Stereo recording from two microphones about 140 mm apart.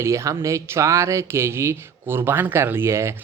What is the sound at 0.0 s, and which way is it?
Speech, 20° right (ahead or behind).